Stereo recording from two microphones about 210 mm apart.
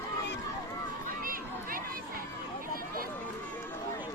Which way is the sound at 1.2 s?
40° right (ahead or behind).